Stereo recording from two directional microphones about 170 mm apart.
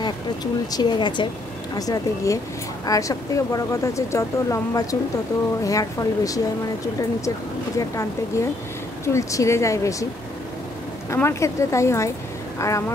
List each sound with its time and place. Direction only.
0.0 s speech: 25° left (ahead or behind)
11.1 s speech: 15° left (ahead or behind)